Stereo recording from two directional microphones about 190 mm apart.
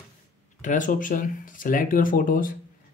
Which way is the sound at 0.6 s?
45° left (ahead or behind).